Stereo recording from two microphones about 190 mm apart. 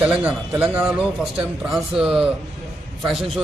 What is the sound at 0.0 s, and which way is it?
A man's voice, 10° right (ahead or behind).